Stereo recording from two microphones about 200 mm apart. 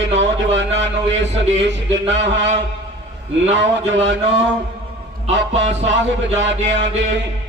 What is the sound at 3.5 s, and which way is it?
Speech, 65° right (ahead or behind).